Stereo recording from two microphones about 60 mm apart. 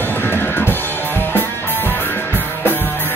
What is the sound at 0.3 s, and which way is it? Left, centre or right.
Music, left.